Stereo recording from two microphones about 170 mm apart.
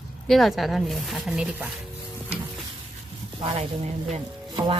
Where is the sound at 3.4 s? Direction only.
35° right (ahead or behind).